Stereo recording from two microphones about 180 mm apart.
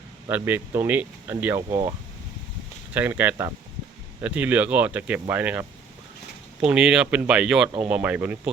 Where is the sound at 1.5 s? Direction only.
25° right (ahead or behind).